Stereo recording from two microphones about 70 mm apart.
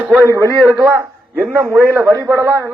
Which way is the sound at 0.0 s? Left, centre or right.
Right.